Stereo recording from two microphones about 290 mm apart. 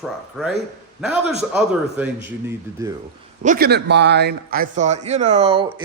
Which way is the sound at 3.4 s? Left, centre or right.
Right.